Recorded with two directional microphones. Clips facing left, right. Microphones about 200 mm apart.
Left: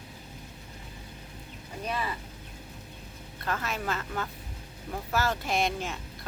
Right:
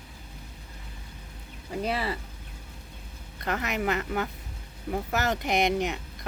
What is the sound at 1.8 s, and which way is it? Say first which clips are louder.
Speech: right 3 dB; 80° right.